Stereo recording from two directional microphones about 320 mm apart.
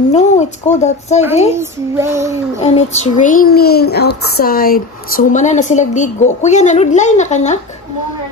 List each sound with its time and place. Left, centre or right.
0.1 s a child's voice: left
1.5 s child singing: centre
2.6 s a child's voice: centre